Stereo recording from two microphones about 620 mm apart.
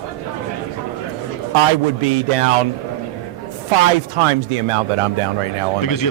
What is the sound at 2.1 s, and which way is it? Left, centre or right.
Speech, right.